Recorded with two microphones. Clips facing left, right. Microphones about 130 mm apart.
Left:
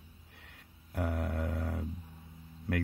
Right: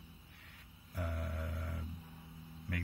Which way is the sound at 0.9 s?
75° left (ahead or behind).